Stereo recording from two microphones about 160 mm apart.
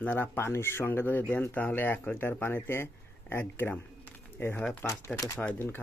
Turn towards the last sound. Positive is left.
turn(degrees=15)  # may be behind; listen again after turning